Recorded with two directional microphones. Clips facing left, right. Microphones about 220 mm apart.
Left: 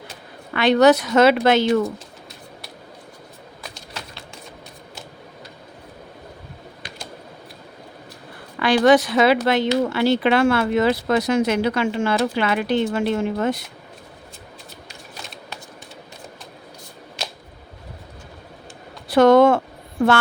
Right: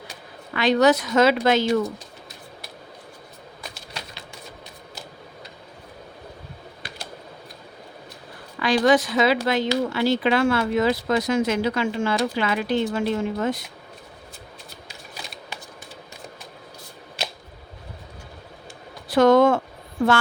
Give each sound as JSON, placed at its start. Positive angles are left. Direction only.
{"t": 0.5, "sound": "speech", "side_deg": 65}
{"t": 8.5, "sound": "speech", "side_deg": 65}
{"t": 19.1, "sound": "a sound", "side_deg": 65}